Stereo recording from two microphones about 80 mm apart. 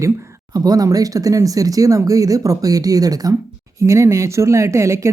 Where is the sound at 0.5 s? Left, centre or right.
Right.